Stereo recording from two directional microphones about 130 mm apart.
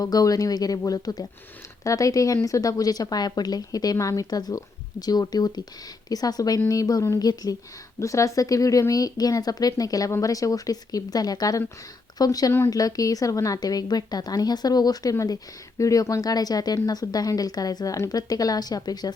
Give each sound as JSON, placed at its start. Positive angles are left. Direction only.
{"t": 0.0, "sound": "a woman's voice", "side_deg": 30}